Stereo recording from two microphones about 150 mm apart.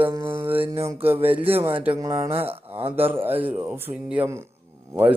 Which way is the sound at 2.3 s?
40° right (ahead or behind).